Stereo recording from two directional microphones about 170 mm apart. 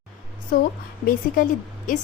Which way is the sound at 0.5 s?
60° left (ahead or behind).